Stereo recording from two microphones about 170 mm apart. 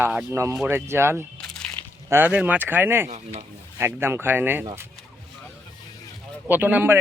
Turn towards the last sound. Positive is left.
turn(degrees=-10)  # may be behind; listen again after turning